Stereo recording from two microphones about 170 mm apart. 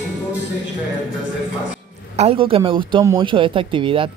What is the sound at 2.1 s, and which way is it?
A man's voice, 35° right (ahead or behind).